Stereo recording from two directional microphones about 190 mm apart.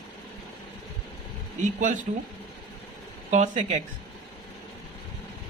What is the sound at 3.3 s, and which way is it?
Speech, 40° right (ahead or behind).